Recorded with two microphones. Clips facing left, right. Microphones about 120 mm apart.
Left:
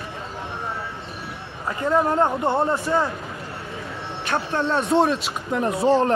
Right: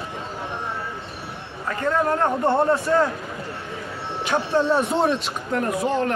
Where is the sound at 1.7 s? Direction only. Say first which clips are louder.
Left 1 dB; 15° left (ahead or behind).